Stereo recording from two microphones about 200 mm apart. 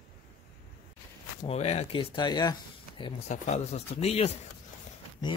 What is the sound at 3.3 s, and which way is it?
Speech, 35° left (ahead or behind).